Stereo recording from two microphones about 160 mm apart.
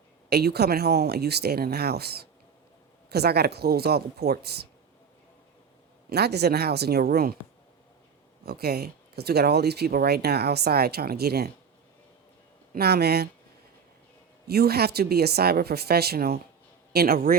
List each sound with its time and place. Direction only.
0.3 s speech: 85° right
6.1 s speech: 90° right; by 7.3 s 75° right (ahead or behind)
8.4 s speech: 80° right
12.7 s speech: 85° right
14.4 s a man's voice: 80° right